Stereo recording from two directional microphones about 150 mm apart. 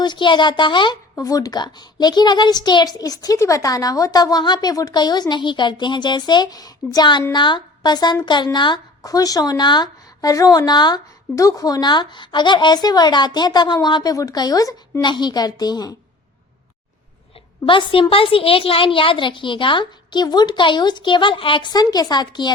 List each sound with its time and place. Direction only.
0.0 s a woman's voice: 30° left (ahead or behind)
17.7 s a woman's voice: 35° left (ahead or behind)